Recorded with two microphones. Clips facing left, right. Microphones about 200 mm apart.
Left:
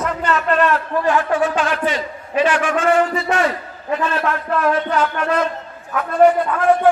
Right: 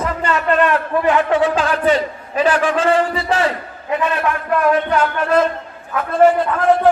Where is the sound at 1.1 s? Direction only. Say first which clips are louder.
Right 2 dB; 20° right (ahead or behind).